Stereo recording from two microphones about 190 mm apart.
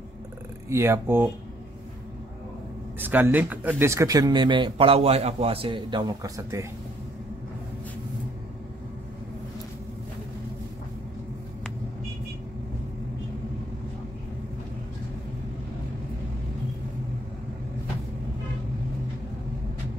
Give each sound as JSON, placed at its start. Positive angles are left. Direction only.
{"t": 0.7, "sound": "speech", "side_deg": -15}
{"t": 3.0, "sound": "speech", "side_deg": -10}